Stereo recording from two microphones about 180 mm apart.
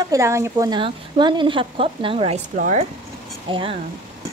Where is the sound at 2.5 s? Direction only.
50° right (ahead or behind).